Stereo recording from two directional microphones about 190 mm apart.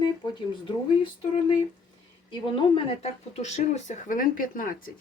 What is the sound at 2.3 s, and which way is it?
Speech, 25° left (ahead or behind).